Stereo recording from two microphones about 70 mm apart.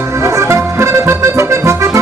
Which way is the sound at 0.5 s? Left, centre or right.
Right.